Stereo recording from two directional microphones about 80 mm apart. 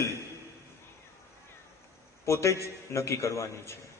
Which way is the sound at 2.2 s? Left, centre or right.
Left.